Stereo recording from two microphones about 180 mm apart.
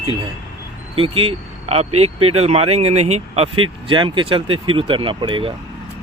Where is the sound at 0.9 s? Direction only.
30° right (ahead or behind).